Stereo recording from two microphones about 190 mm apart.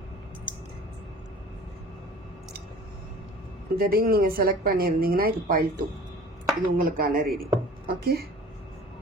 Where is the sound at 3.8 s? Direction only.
50° right (ahead or behind).